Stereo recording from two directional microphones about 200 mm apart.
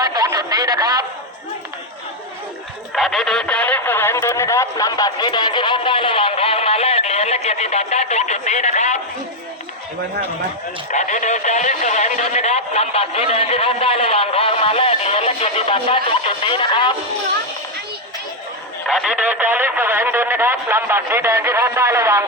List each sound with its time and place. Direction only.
0.0 s a sound: 20° right (ahead or behind)
2.9 s speech: centre (ahead or behind); by 9.0 s 35° left (ahead or behind)
10.9 s speech: 40° left (ahead or behind)
18.9 s speech: centre (ahead or behind)